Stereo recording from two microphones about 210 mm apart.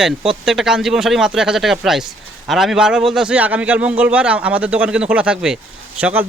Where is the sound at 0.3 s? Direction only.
Centre (ahead or behind).